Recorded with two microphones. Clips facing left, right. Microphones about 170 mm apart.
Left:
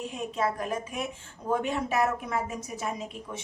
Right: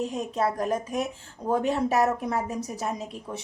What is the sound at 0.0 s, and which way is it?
A woman's voice, 40° right (ahead or behind).